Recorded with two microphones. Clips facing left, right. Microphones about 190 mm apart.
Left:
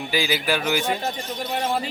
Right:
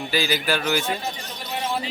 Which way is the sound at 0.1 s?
10° left (ahead or behind).